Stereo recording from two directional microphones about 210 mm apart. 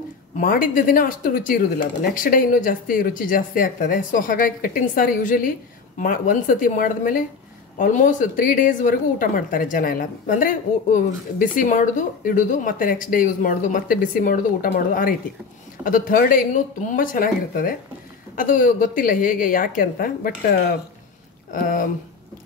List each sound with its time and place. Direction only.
0.4 s a woman's voice: 40° left (ahead or behind)